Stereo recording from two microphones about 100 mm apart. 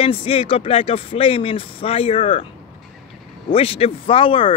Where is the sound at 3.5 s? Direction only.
80° left; by 4.5 s 60° left (ahead or behind).